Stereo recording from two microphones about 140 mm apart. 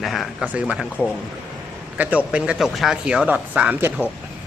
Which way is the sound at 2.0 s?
10° right (ahead or behind).